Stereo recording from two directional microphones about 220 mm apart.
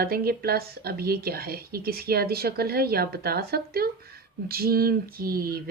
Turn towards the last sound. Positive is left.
turn(degrees=-40)  # may be behind; listen again after turning